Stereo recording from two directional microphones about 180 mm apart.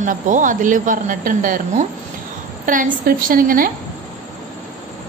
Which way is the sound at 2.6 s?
50° right (ahead or behind).